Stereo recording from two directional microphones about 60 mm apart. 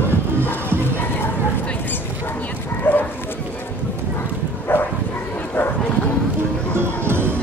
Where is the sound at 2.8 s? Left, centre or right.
Left.